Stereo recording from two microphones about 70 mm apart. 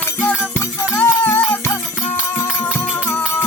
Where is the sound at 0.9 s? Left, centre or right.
Left.